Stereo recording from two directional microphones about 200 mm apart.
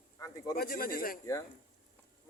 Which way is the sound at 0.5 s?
45° left (ahead or behind).